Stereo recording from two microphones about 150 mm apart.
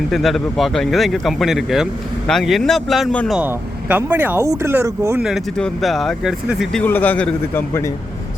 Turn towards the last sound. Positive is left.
turn(degrees=15)  # may be behind; listen again after turning